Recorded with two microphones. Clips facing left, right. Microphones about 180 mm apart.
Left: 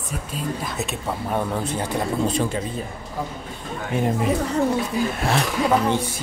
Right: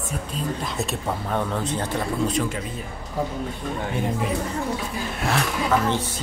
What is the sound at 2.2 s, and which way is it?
Speech, 30° left (ahead or behind).